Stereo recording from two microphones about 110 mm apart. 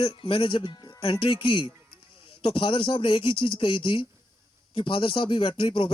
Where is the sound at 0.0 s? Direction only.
50° left (ahead or behind).